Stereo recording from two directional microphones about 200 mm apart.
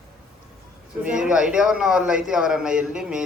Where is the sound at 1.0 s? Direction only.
5° right (ahead or behind).